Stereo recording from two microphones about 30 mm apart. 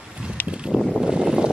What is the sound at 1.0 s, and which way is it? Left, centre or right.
Boat, centre.